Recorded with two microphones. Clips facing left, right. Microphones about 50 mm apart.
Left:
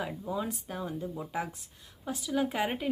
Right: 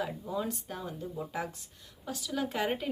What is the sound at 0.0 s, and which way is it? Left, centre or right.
A woman's voice, centre.